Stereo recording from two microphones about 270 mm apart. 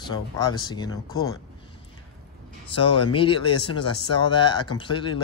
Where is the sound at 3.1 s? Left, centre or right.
Centre.